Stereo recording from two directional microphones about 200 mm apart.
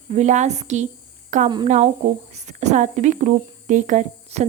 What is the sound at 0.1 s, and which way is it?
A woman's voice, 35° right (ahead or behind).